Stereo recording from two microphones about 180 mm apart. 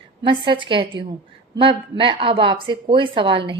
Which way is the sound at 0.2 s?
25° right (ahead or behind).